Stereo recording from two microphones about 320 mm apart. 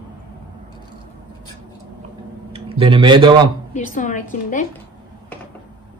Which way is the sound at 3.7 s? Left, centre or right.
Left.